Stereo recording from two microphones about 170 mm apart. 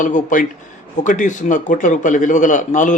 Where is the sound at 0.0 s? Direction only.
50° left (ahead or behind).